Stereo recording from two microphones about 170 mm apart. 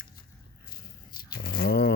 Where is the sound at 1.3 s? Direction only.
65° left (ahead or behind).